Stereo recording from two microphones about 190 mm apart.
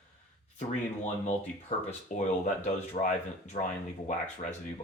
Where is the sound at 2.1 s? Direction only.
40° left (ahead or behind).